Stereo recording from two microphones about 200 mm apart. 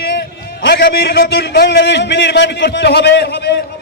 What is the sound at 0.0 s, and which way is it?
A man's voice, 60° left (ahead or behind).